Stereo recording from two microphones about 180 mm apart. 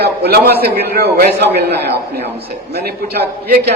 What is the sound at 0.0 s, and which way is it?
A man's voice, 60° right (ahead or behind).